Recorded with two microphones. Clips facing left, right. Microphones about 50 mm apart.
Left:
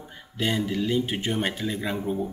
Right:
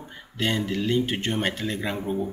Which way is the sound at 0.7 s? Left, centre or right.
Centre.